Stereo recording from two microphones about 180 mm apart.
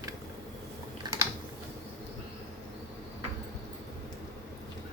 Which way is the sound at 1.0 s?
25° right (ahead or behind).